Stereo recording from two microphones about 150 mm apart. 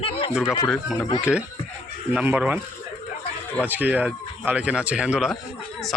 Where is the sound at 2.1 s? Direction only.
10° right (ahead or behind).